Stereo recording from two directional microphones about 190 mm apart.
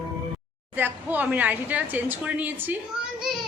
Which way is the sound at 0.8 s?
10° right (ahead or behind).